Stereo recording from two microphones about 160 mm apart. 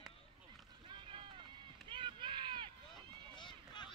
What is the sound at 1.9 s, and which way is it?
Run, 30° right (ahead or behind).